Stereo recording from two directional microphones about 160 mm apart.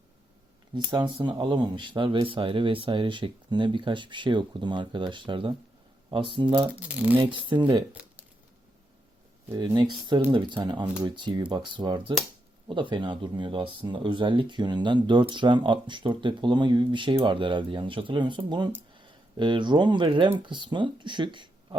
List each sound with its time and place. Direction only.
0.7 s speech: 30° right (ahead or behind)
6.7 s speech: 10° right (ahead or behind)
7.2 s speech: 30° right (ahead or behind)
9.6 s speech: 25° right (ahead or behind)